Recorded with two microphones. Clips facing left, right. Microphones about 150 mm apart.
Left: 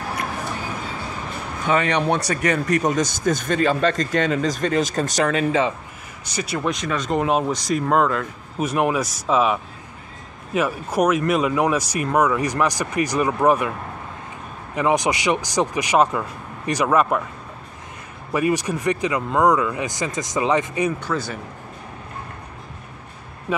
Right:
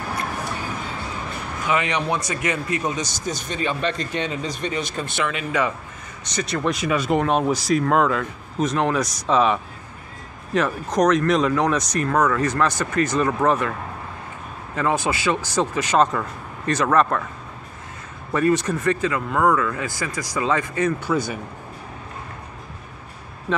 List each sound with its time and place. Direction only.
1.7 s a man's voice: 35° left (ahead or behind)
6.2 s speech: 10° left (ahead or behind)
6.7 s speech: 10° right (ahead or behind)
7.2 s speech: 5° left (ahead or behind)
14.8 s speech: 15° left (ahead or behind)
18.3 s speech: 10° left (ahead or behind)
21.0 s speech: 10° right (ahead or behind)